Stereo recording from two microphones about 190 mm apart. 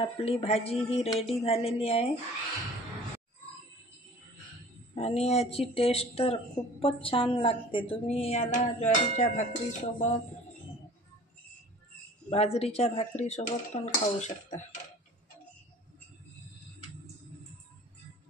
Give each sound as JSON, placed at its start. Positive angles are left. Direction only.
{"t": 0.0, "sound": "speech", "side_deg": 30}
{"t": 4.9, "sound": "speech", "side_deg": 35}
{"t": 12.5, "sound": "speech", "side_deg": 30}